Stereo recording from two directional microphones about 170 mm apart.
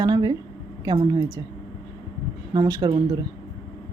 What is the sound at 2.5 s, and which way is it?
Speech, 20° right (ahead or behind).